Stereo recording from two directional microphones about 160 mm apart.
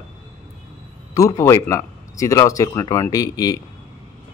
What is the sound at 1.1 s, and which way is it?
Speech, 20° left (ahead or behind).